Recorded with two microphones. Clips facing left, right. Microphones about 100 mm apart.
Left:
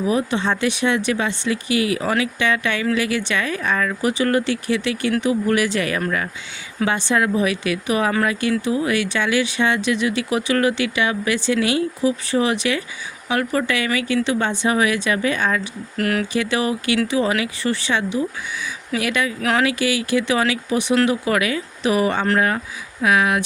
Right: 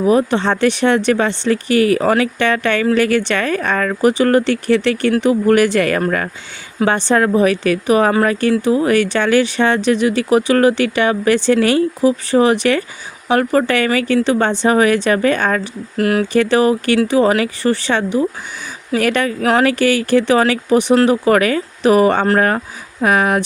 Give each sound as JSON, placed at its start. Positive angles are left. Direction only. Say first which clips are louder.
{"t": 0.0, "sound": "speech", "louder": "right 6 dB", "side_deg": -50}
{"t": 4.4, "sound": "speech", "louder": "right 7 dB", "side_deg": -60}
{"t": 9.1, "sound": "speech", "louder": "right 6 dB", "side_deg": -50}
{"t": 16.0, "sound": "speech", "louder": "right 6 dB", "side_deg": -30}
{"t": 16.3, "sound": "speech", "louder": "right 8 dB", "side_deg": -50}
{"t": 19.5, "sound": "speech", "louder": "right 6 dB", "side_deg": -40}
{"t": 20.9, "sound": "speech", "louder": "right 5 dB", "side_deg": -40}